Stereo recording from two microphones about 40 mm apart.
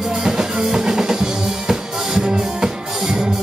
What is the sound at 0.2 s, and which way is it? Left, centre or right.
Music, centre.